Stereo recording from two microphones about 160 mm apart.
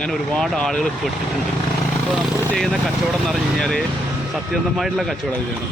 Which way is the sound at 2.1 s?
Centre (ahead or behind).